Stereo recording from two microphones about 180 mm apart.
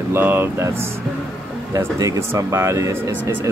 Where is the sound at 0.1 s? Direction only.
10° right (ahead or behind).